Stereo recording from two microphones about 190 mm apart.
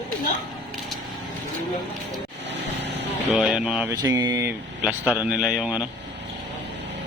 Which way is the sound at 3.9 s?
15° right (ahead or behind).